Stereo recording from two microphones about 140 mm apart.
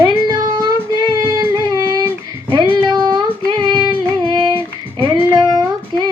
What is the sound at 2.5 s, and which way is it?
Music, 30° right (ahead or behind).